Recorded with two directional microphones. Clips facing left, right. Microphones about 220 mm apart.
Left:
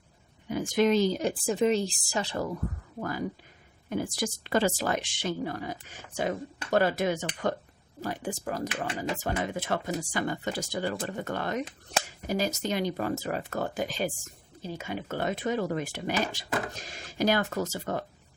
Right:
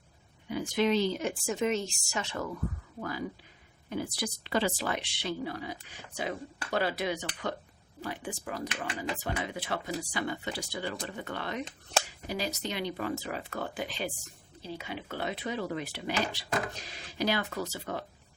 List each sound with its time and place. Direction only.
0.4 s speech: 45° left (ahead or behind)
3.0 s speech: 45° left (ahead or behind)